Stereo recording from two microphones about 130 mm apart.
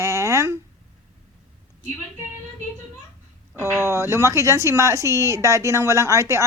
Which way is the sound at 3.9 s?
25° right (ahead or behind).